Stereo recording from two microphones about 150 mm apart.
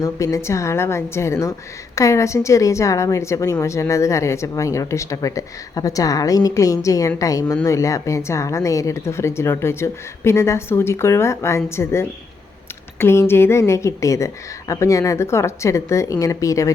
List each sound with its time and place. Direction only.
0.0 s a woman's voice: 20° left (ahead or behind)